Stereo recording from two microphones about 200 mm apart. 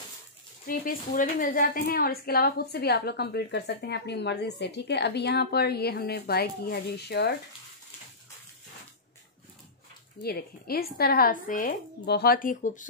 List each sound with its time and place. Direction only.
0.7 s a woman's voice: 45° left (ahead or behind)
10.2 s a woman's voice: 50° left (ahead or behind)